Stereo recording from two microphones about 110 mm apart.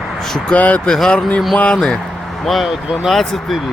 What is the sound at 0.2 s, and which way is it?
Speech, 5° left (ahead or behind).